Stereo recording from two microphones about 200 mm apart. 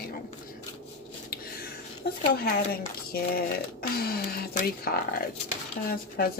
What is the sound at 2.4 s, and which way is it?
Speech, 50° left (ahead or behind).